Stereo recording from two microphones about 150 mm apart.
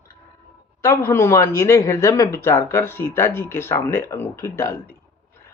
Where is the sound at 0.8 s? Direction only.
15° left (ahead or behind).